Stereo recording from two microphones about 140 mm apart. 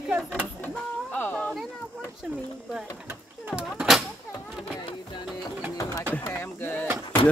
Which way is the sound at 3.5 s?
5° right (ahead or behind).